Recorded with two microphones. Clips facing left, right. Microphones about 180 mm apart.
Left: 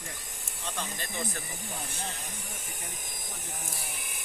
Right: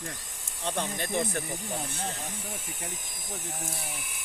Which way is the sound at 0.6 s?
60° right (ahead or behind).